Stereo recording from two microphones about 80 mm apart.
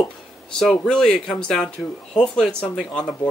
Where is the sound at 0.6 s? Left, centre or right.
Centre.